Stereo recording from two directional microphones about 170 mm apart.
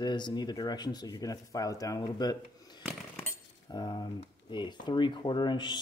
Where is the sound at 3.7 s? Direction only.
25° left (ahead or behind).